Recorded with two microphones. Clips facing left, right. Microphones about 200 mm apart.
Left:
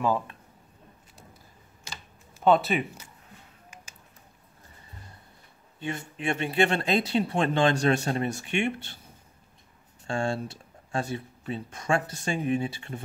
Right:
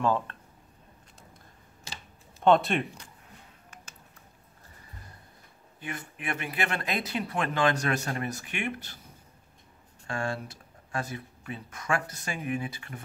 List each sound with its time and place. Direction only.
0.0 s speech: 10° left (ahead or behind)
2.4 s speech: centre (ahead or behind)
5.8 s speech: 25° left (ahead or behind)
10.0 s speech: 30° left (ahead or behind)